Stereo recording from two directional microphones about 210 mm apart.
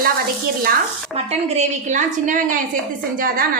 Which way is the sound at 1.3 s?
30° right (ahead or behind).